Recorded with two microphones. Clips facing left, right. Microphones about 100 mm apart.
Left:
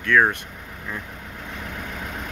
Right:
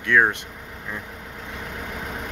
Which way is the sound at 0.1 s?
15° right (ahead or behind).